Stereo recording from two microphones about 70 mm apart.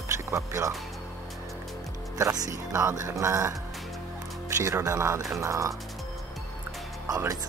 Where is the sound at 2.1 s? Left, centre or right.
Right.